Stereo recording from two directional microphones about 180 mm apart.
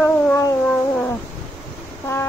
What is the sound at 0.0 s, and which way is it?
Music, 15° left (ahead or behind).